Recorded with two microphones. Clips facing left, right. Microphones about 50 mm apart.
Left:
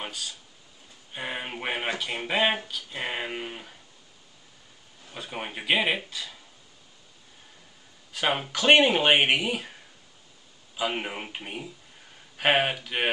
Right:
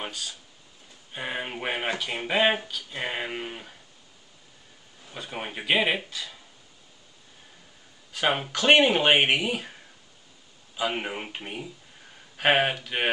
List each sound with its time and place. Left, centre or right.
0.0 s speech: centre
5.1 s speech: centre
8.1 s speech: centre
10.8 s speech: centre